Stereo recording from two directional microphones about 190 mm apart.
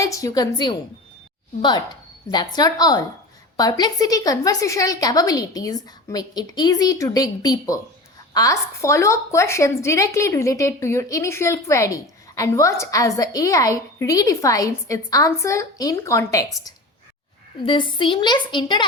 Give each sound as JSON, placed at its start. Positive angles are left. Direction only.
{"t": 0.0, "sound": "a woman's voice", "side_deg": 15}